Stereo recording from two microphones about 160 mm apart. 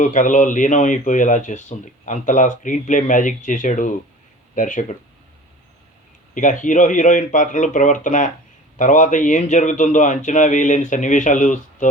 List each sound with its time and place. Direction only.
0.0 s speech: 50° left (ahead or behind)
6.3 s speech: 55° left (ahead or behind)